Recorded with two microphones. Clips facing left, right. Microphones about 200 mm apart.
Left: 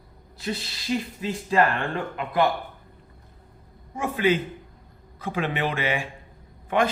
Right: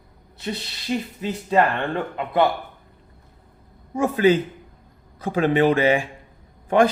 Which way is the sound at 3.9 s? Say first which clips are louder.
Right 5 dB; 40° right (ahead or behind).